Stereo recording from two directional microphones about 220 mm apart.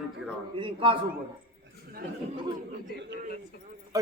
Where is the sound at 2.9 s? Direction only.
50° right (ahead or behind).